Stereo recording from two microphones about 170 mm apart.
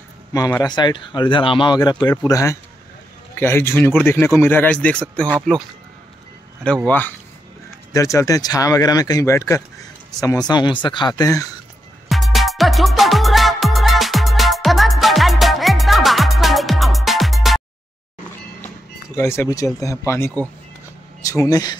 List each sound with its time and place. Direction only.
0.3 s speech: 20° left (ahead or behind)
6.9 s speech: 10° left (ahead or behind)
12.1 s music: centre (ahead or behind)
19.1 s speech: 15° left (ahead or behind)